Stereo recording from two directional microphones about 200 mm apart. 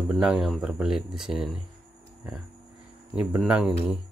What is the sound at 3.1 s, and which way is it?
Speech, 5° right (ahead or behind).